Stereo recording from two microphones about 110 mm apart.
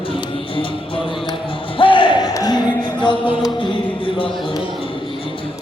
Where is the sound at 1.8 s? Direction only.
50° left (ahead or behind).